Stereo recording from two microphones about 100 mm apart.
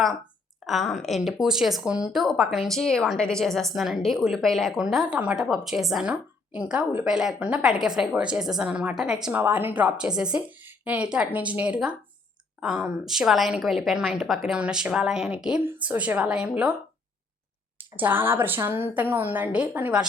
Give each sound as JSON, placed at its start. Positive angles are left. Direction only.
{"t": 0.6, "sound": "a woman's voice", "side_deg": 0}
{"t": 17.7, "sound": "a woman's voice", "side_deg": -20}